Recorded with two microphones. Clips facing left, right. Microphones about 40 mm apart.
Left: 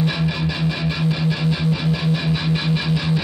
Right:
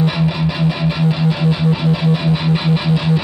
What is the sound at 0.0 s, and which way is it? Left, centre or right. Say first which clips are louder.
Music: right 4 dB; centre.